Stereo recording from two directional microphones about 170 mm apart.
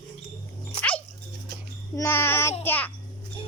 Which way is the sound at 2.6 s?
10° left (ahead or behind).